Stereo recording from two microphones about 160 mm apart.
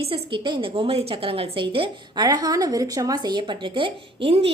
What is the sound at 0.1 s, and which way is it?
A woman's voice, 30° right (ahead or behind).